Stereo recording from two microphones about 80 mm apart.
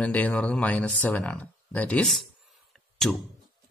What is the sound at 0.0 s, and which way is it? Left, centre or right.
Speech, centre.